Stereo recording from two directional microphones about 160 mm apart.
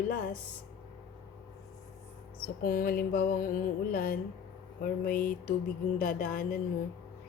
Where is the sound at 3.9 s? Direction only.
65° left (ahead or behind).